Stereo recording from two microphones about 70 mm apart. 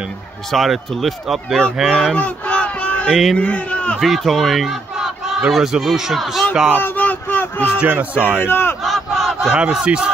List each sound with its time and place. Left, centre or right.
0.5 s speech: centre
2.1 s a sound: centre
3.3 s a man's voice: centre
4.0 s speech: centre
6.8 s a sound: left
7.8 s speech: right
8.4 s speech: left
8.8 s battle cry: centre
9.5 s battle cry: centre